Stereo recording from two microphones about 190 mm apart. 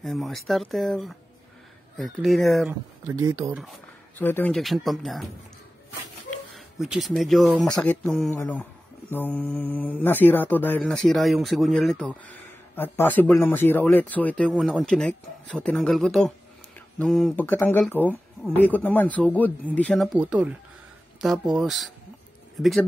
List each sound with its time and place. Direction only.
0.0 s speech: centre (ahead or behind)
3.1 s speech: 15° right (ahead or behind)
4.2 s speech: 10° left (ahead or behind)
6.8 s speech: centre (ahead or behind)